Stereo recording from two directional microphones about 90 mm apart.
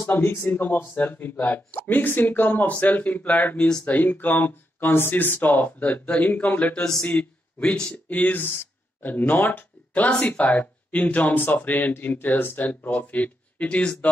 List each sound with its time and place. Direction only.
0.0 s speech: 25° left (ahead or behind)
3.9 s speech: 20° left (ahead or behind)